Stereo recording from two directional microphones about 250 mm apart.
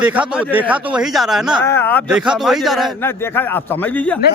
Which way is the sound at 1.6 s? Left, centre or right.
Centre.